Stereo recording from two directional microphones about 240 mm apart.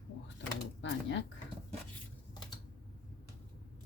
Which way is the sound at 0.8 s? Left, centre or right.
Left.